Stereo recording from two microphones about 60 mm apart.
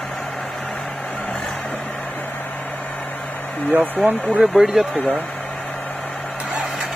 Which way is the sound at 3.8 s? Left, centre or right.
Right.